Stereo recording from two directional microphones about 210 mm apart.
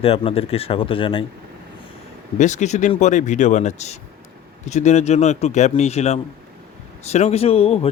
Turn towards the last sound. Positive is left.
turn(degrees=25)  # may be behind; listen again after turning